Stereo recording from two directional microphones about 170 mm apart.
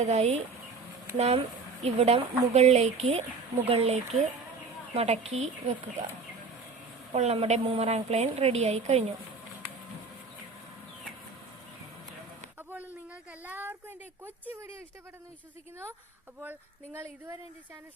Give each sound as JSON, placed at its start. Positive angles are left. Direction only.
{"t": 0.0, "sound": "a woman's voice", "side_deg": -40}
{"t": 7.1, "sound": "a woman's voice", "side_deg": -40}
{"t": 12.7, "sound": "a sound", "side_deg": -10}
{"t": 16.4, "sound": "speech", "side_deg": -15}